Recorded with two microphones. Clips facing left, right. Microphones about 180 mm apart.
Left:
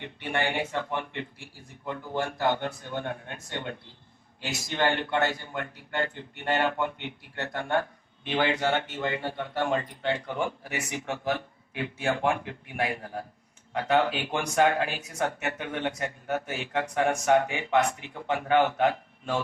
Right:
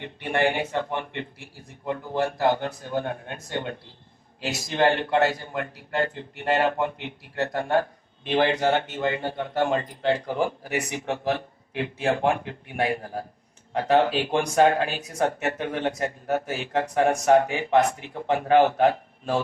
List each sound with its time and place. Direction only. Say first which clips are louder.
0.3 s speech: right 5 dB; 30° right (ahead or behind)